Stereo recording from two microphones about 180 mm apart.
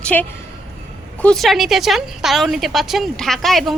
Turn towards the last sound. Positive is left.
turn(degrees=0)  # may be behind; listen again after turning